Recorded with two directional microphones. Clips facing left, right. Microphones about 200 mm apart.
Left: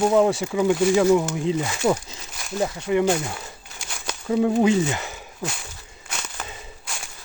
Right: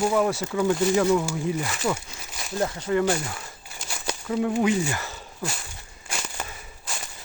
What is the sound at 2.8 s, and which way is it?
Speech, 15° left (ahead or behind).